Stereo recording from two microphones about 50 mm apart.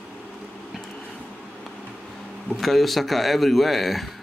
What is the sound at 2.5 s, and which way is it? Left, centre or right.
Speech, centre.